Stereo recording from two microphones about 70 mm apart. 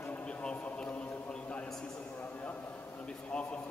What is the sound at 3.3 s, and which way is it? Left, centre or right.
Speech, centre.